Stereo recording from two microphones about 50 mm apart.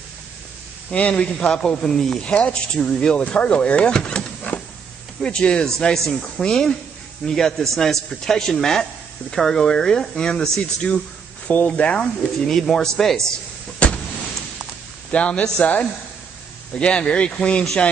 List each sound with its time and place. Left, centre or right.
0.9 s speech: left; by 2.1 s centre
2.2 s speech: left
4.5 s a sound: left
5.2 s a man's voice: centre
5.9 s a man's voice: centre; by 12.1 s left
12.4 s a man's voice: centre
13.8 s a sound: left
15.0 s speech: left